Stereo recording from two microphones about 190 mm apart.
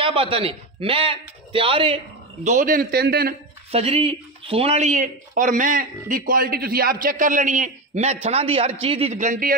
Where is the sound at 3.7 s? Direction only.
30° right (ahead or behind).